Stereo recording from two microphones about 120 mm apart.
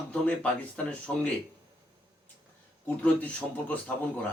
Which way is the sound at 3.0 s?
10° left (ahead or behind).